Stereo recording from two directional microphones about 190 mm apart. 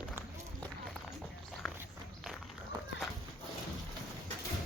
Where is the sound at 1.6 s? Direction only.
Centre (ahead or behind).